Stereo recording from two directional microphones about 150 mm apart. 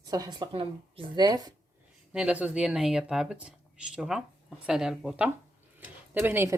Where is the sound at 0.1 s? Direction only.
25° right (ahead or behind).